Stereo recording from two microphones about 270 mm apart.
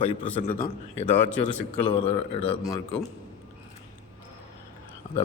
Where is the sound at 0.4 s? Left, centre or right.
Left.